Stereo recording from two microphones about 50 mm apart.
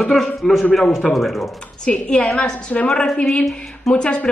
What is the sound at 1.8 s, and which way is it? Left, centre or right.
A woman's voice, centre.